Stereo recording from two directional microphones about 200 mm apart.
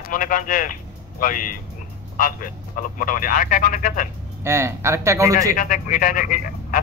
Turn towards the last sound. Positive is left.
turn(degrees=40)  # may be behind; listen again after turning